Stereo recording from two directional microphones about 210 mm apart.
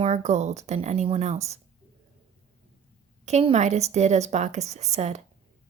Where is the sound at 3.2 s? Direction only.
30° right (ahead or behind).